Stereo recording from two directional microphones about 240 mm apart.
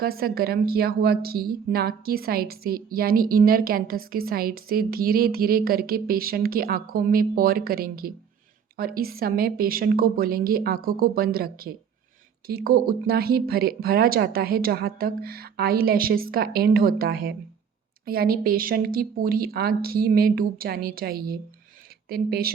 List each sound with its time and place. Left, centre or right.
0.0 s a woman's voice: right